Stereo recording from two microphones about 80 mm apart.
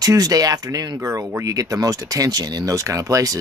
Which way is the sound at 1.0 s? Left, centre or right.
Right.